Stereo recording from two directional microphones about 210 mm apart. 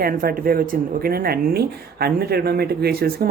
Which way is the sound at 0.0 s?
45° right (ahead or behind).